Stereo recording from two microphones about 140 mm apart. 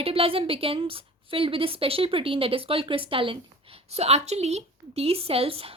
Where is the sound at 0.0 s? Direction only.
45° right (ahead or behind).